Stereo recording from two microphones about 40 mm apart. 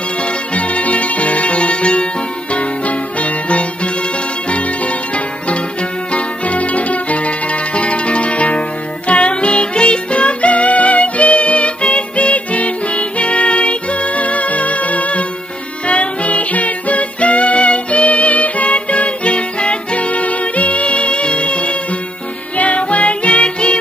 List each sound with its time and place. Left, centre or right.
0.2 s music: left